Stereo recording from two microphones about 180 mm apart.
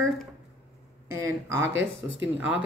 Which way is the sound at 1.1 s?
15° right (ahead or behind).